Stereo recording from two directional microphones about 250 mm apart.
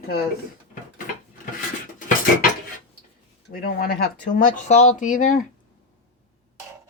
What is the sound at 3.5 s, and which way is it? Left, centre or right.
Speech, left.